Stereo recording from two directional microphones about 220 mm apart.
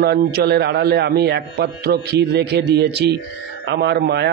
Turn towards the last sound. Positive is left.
turn(degrees=-50)  # may be behind; listen again after turning